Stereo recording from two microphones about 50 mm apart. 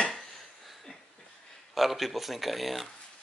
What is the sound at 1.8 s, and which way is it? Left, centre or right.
Speech, centre.